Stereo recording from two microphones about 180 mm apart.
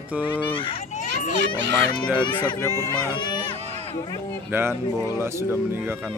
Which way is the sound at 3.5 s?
40° right (ahead or behind).